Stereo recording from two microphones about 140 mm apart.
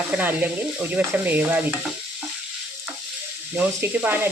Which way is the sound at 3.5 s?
15° right (ahead or behind).